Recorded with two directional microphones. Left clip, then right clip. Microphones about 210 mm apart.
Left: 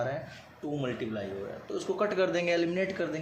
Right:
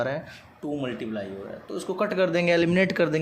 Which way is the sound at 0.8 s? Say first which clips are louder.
Even; 25° right (ahead or behind).